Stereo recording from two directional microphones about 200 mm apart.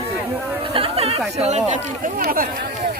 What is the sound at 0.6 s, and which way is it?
Chatter, 25° right (ahead or behind).